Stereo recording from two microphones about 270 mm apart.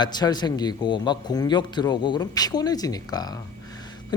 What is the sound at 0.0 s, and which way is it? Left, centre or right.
A man's voice, centre.